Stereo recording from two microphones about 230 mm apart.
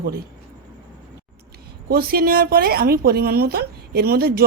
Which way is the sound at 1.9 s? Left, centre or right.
Right.